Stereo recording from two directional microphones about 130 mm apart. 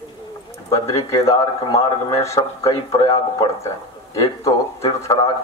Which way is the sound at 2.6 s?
45° left (ahead or behind).